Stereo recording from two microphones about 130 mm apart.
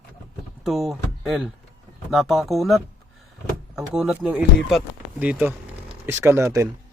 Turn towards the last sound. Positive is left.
turn(degrees=-20)  # may be behind; listen again after turning